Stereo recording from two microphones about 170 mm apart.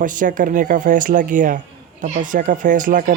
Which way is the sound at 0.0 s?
50° right (ahead or behind).